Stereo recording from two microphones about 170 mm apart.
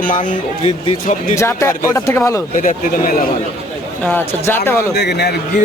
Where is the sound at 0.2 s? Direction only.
30° left (ahead or behind).